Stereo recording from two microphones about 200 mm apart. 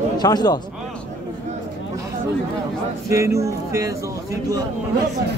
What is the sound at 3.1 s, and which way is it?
Speech, 15° right (ahead or behind).